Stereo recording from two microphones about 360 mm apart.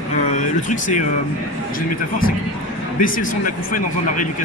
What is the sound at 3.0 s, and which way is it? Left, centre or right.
Speech, left.